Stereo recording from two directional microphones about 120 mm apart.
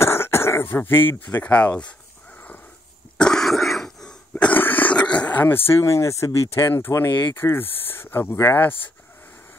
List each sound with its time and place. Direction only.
0.0 s speech: 20° left (ahead or behind)
3.2 s throat clearing: 5° left (ahead or behind)
7.3 s speech: 20° left (ahead or behind)